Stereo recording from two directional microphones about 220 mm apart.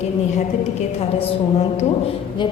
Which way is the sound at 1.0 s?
25° left (ahead or behind).